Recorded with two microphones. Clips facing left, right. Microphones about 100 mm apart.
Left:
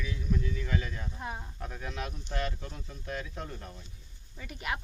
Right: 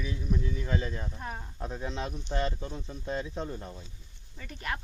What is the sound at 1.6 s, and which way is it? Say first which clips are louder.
Speech: right 6 dB; 25° right (ahead or behind).